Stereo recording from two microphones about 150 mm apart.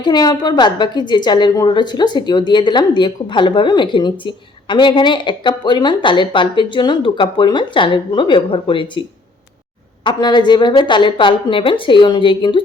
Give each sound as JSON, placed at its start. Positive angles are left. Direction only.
{"t": 0.0, "sound": "a woman's voice", "side_deg": 30}